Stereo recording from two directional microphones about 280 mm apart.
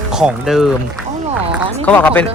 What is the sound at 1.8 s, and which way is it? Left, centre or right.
Speech, centre.